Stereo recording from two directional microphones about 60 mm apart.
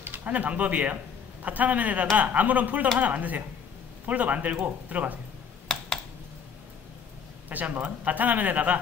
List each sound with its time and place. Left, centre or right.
0.0 s speech: right
5.7 s computer keyboard: centre
7.4 s speech: right